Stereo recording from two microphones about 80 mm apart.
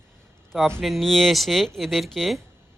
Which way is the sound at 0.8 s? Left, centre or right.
Centre.